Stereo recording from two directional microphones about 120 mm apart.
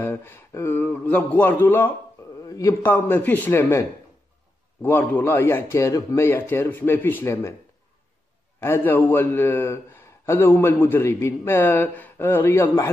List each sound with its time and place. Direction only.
0.0 s a man's voice: 20° left (ahead or behind)
4.8 s a man's voice: 15° left (ahead or behind)
8.5 s a man's voice: 20° left (ahead or behind)